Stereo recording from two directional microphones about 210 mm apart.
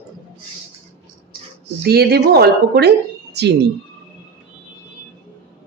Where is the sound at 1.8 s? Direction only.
50° right (ahead or behind).